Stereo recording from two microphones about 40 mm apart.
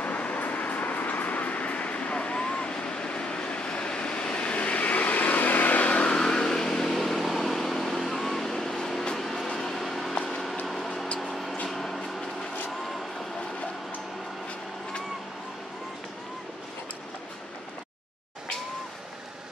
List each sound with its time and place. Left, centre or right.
0.0 s vehicle: left
6.1 s vehicle: centre
11.1 s a sound: centre
11.7 s vehicle: centre